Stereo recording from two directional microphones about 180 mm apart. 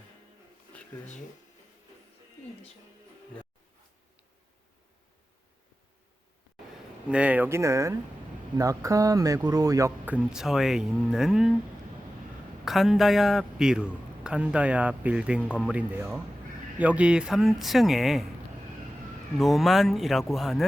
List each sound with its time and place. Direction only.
7.1 s speech: 5° right (ahead or behind)
12.6 s a man's voice: centre (ahead or behind)
19.4 s a man's voice: centre (ahead or behind)